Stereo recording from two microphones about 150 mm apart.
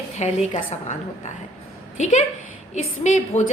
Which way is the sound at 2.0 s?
50° left (ahead or behind).